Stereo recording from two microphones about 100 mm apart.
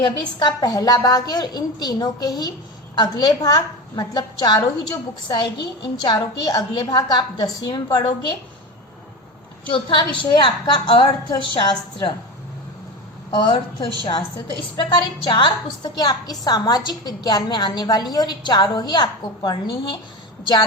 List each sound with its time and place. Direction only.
0.0 s a woman's voice: 50° left (ahead or behind)
9.6 s a woman's voice: 55° left (ahead or behind)
13.3 s a woman's voice: 65° left (ahead or behind)
14.8 s a woman's voice: 50° left (ahead or behind)